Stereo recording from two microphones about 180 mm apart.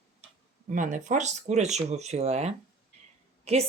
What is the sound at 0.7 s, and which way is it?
Speech, 45° right (ahead or behind).